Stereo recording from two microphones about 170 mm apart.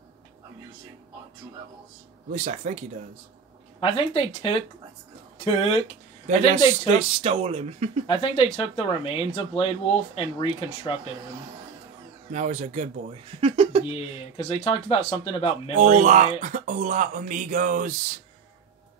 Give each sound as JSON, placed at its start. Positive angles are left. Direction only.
{"t": 2.3, "sound": "speech", "side_deg": -40}
{"t": 3.8, "sound": "speech", "side_deg": 30}
{"t": 6.9, "sound": "speech", "side_deg": -35}
{"t": 8.1, "sound": "speech", "side_deg": 30}
{"t": 12.3, "sound": "speech", "side_deg": -45}
{"t": 13.4, "sound": "speech", "side_deg": -30}
{"t": 13.9, "sound": "speech", "side_deg": 35}
{"t": 15.8, "sound": "speech", "side_deg": -45}